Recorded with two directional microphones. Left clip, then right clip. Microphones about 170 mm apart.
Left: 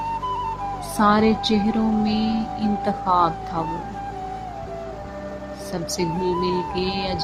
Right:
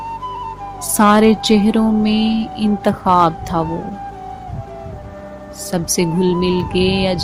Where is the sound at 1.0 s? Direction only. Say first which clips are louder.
Right 6 dB; 50° right (ahead or behind).